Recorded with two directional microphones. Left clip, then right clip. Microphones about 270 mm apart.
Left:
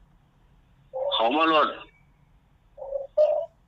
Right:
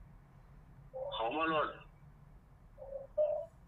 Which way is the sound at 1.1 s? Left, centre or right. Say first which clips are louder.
Left 13 dB; left.